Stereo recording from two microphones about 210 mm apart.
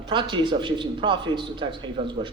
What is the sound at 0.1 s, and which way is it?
A man's voice, 20° right (ahead or behind).